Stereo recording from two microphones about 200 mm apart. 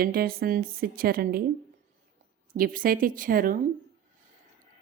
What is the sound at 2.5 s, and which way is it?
A woman's voice, 45° right (ahead or behind).